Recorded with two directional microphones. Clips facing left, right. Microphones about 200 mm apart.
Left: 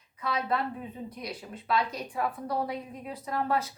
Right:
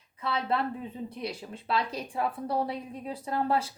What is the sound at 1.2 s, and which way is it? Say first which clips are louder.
A woman's voice: right 3 dB; 30° right (ahead or behind).